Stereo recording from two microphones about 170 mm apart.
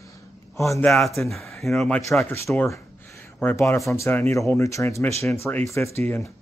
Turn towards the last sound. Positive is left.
turn(degrees=15)  # may be behind; listen again after turning